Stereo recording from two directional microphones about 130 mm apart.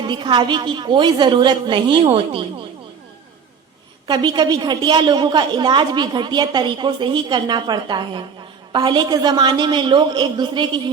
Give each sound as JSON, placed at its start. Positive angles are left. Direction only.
{"t": 0.0, "sound": "a woman's voice", "side_deg": -35}
{"t": 4.0, "sound": "a woman's voice", "side_deg": -35}